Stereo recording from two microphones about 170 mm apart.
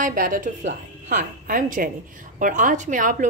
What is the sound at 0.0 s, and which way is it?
A woman's voice, 55° right (ahead or behind).